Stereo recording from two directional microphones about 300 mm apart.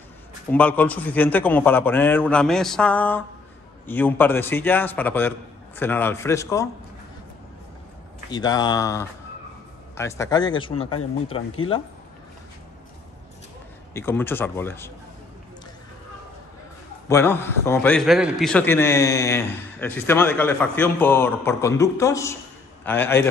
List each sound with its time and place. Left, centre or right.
0.5 s a man's voice: centre
8.3 s a man's voice: centre
13.9 s a man's voice: centre
17.1 s a man's voice: centre